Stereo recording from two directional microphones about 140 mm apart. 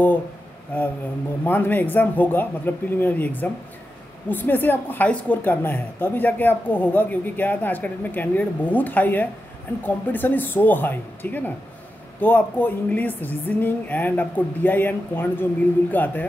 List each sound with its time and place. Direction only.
0.7 s a woman's voice: 15° left (ahead or behind)